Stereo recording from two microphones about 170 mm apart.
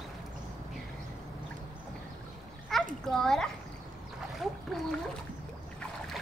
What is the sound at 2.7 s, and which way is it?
Splash, centre (ahead or behind).